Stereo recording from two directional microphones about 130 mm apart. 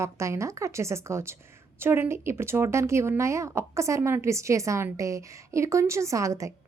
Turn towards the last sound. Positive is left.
turn(degrees=-25)  # may be behind; listen again after turning